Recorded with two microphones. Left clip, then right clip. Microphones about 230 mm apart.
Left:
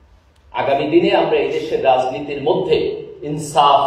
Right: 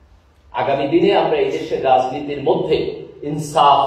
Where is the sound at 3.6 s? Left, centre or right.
Left.